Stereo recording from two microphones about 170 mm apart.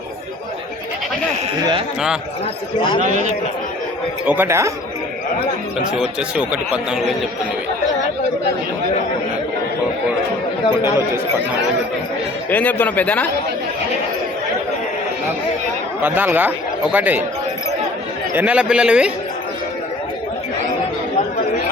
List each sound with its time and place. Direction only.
3.0 s a man's voice: 45° right (ahead or behind)
4.3 s speech: 15° right (ahead or behind)
5.9 s speech: 5° right (ahead or behind)
10.7 s speech: 25° left (ahead or behind)
12.5 s speech: 10° left (ahead or behind)
16.0 s speech: 10° right (ahead or behind)
18.3 s speech: 5° right (ahead or behind)